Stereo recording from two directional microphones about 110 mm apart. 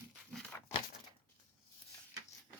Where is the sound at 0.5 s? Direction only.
20° left (ahead or behind).